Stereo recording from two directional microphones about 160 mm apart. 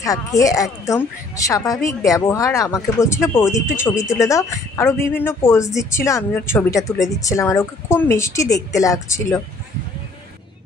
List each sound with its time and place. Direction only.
0.0 s a woman's voice: 20° left (ahead or behind)